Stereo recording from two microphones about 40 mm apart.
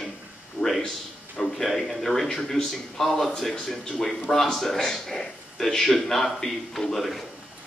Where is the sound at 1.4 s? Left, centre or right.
Centre.